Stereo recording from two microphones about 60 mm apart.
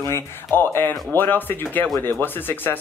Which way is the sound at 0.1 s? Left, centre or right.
Left.